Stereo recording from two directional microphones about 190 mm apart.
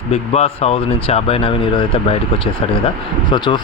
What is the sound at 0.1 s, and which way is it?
Speech, 35° left (ahead or behind).